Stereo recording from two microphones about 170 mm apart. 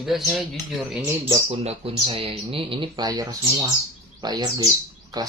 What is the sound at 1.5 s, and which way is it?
Speech, 35° right (ahead or behind).